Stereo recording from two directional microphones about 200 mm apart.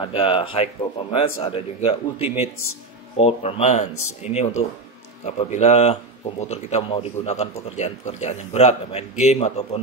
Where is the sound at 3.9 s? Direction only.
90° left.